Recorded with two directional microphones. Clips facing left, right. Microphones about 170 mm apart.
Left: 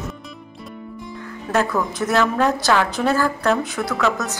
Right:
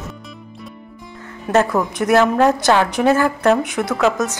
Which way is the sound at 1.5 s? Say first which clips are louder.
Right 4 dB; 20° right (ahead or behind).